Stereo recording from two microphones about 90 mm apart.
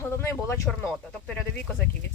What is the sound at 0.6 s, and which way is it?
Speech, 5° left (ahead or behind).